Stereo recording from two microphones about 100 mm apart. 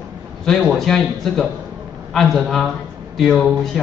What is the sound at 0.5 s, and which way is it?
Speech, 5° left (ahead or behind).